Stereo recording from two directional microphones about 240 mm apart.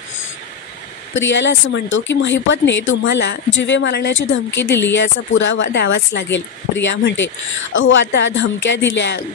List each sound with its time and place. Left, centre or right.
1.1 s speech: left